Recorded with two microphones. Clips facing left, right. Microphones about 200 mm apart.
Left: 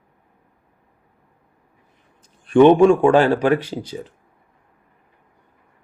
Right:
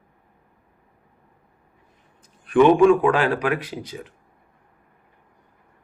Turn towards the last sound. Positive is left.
turn(degrees=30)  # may be behind; listen again after turning